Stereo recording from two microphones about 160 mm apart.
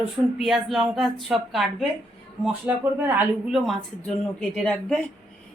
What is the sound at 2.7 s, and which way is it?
Speech, 10° right (ahead or behind).